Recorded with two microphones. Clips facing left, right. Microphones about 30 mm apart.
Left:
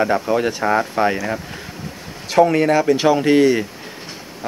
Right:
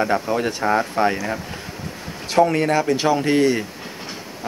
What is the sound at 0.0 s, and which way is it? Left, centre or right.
Speech, centre.